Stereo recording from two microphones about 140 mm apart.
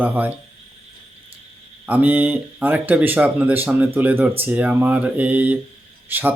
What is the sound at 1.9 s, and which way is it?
Speech, 10° right (ahead or behind).